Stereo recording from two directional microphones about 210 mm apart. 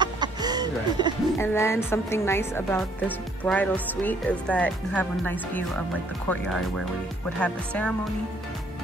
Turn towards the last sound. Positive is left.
turn(degrees=5)  # may be behind; listen again after turning